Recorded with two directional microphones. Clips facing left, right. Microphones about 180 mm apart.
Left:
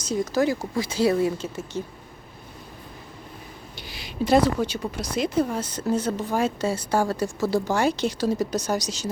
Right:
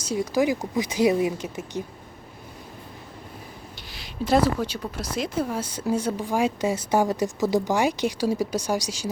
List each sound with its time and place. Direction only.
0.0 s speech: 10° right (ahead or behind)
3.9 s a sound: centre (ahead or behind)
4.9 s speech: 5° right (ahead or behind)